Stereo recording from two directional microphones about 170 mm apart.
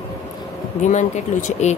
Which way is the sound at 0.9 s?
45° left (ahead or behind).